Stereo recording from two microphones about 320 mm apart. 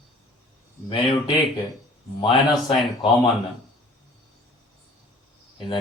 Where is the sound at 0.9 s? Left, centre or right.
Centre.